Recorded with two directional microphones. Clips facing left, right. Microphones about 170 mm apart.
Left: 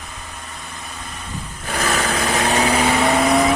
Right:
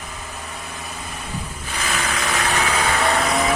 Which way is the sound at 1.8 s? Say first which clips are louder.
Left 5 dB; 40° left (ahead or behind).